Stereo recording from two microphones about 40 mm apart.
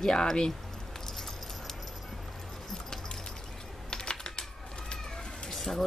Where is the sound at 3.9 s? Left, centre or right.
Centre.